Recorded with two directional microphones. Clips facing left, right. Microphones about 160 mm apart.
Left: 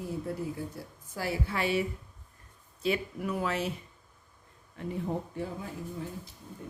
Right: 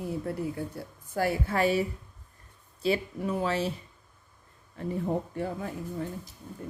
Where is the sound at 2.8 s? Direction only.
30° right (ahead or behind).